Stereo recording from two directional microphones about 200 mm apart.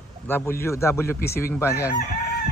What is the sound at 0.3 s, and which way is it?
Speech, 10° left (ahead or behind).